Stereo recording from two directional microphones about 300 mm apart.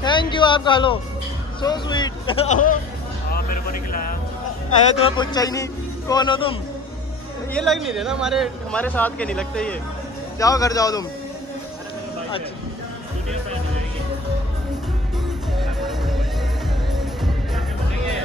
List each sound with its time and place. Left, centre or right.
0.0 s a sound: centre
1.6 s a man's voice: centre
5.0 s a man's voice: centre
7.5 s a man's voice: centre
15.8 s music: centre